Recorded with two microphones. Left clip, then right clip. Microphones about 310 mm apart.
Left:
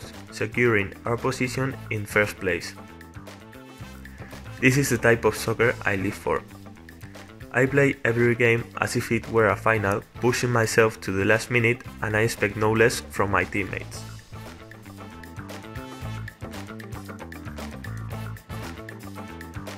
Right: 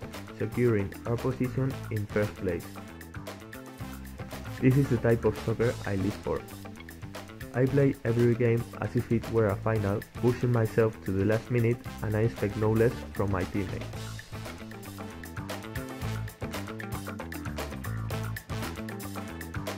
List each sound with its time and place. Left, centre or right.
0.4 s speech: left
4.6 s speech: left
7.5 s speech: left